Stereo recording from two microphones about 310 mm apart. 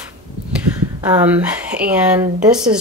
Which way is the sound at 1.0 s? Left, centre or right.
Centre.